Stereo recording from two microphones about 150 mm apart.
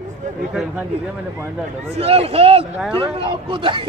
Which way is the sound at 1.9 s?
40° right (ahead or behind).